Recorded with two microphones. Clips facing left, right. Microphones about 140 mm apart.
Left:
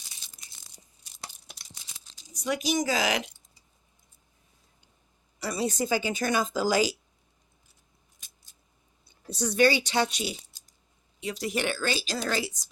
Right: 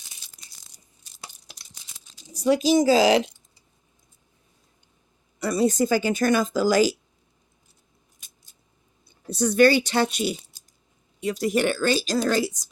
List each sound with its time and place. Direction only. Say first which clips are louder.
1.2 s a sound: even; centre (ahead or behind)
2.3 s speech: right 9 dB; 30° right (ahead or behind)
5.4 s speech: right 8 dB; 50° right (ahead or behind)
9.2 s speech: right 5 dB; 50° right (ahead or behind)